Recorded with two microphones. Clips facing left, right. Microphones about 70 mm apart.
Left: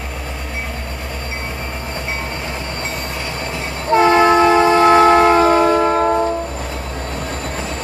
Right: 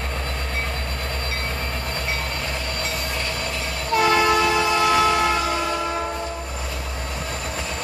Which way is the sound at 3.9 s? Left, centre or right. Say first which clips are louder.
Left 7 dB; left.